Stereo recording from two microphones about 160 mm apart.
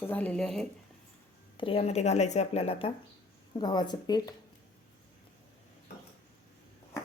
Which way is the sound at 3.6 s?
25° left (ahead or behind).